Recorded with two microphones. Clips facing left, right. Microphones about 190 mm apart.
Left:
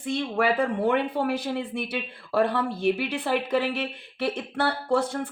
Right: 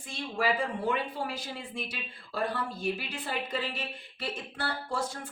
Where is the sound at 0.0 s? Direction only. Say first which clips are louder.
Left 7 dB; 60° left (ahead or behind).